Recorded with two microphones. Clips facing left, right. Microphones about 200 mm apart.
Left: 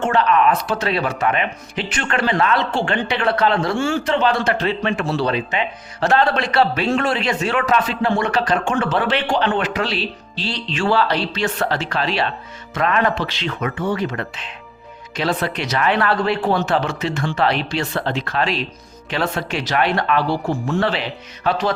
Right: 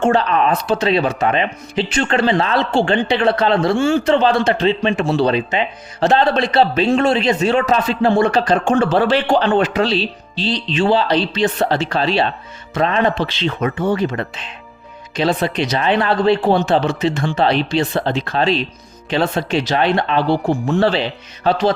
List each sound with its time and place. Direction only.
0.0 s speech: 30° right (ahead or behind)